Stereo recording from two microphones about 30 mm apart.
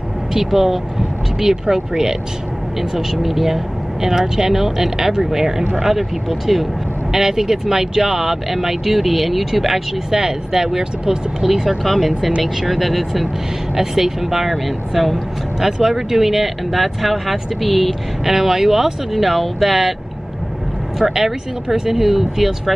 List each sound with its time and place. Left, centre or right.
0.3 s speech: centre
2.9 s speech: centre
7.1 s speech: centre
10.1 s speech: centre
11.8 s speech: centre
18.3 s speech: centre
21.0 s speech: centre